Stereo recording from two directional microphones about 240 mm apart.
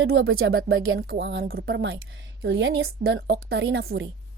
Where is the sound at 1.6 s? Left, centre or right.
Right.